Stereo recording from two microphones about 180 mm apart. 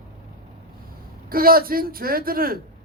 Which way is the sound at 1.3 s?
55° right (ahead or behind).